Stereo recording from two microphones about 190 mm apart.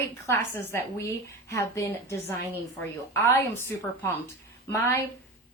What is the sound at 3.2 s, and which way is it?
A woman's voice, 15° left (ahead or behind).